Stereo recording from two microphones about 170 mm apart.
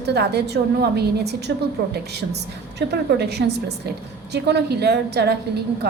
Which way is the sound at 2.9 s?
75° right (ahead or behind).